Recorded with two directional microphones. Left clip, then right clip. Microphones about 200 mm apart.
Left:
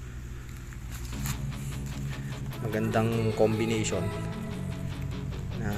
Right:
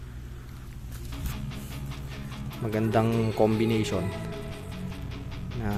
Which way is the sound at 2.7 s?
15° right (ahead or behind).